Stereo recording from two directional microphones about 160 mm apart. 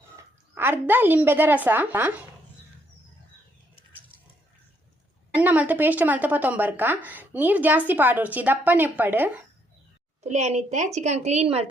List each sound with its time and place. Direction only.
0.2 s speech: 15° right (ahead or behind)
5.3 s a woman's voice: 10° right (ahead or behind)
10.2 s a woman's voice: 45° right (ahead or behind)